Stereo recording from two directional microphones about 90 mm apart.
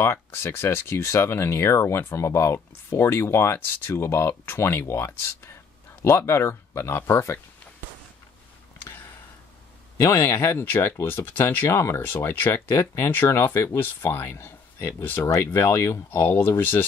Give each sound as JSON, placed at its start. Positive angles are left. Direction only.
{"t": 0.0, "sound": "speech", "side_deg": 25}
{"t": 10.0, "sound": "speech", "side_deg": 30}